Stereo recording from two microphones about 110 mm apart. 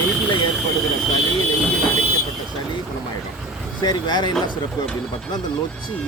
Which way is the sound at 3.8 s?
40° left (ahead or behind).